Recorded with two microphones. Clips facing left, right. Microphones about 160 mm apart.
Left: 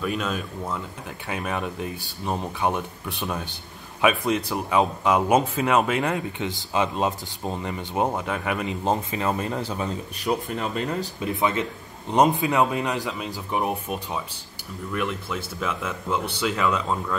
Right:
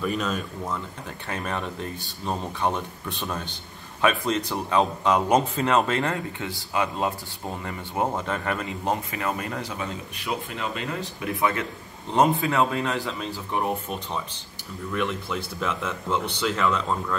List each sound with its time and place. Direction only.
0.0 s speech: centre (ahead or behind); by 11.1 s 40° left (ahead or behind)
11.1 s speech: 20° left (ahead or behind); by 16.8 s 5° left (ahead or behind)